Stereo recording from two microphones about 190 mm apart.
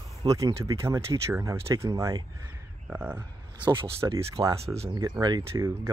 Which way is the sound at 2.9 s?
10° right (ahead or behind).